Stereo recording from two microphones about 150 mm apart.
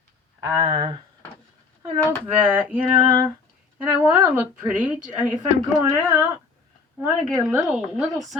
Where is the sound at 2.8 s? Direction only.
30° right (ahead or behind).